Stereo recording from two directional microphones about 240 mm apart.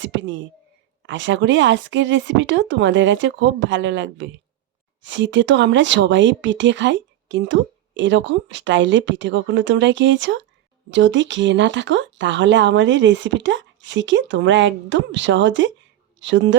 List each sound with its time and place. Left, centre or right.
0.0 s speech: right